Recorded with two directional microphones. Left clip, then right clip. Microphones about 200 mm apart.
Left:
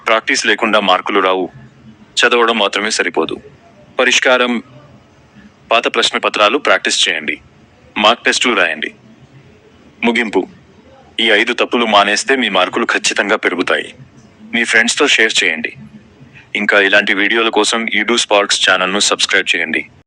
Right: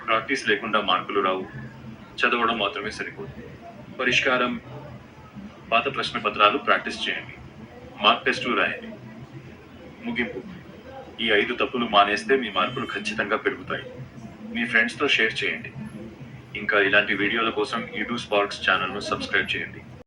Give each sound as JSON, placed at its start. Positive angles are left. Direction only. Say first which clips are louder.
{"t": 0.1, "sound": "speech", "louder": "left 10 dB", "side_deg": 65}
{"t": 5.6, "sound": "speech", "louder": "left 11 dB", "side_deg": 65}
{"t": 11.2, "sound": "speech", "louder": "left 10 dB", "side_deg": 65}